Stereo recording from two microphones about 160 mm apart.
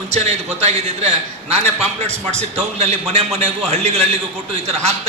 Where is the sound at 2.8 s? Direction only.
45° right (ahead or behind).